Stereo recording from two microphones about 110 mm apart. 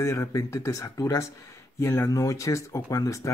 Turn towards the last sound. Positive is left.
turn(degrees=30)  # may be behind; listen again after turning